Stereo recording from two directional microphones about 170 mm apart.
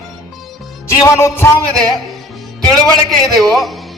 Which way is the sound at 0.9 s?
15° left (ahead or behind).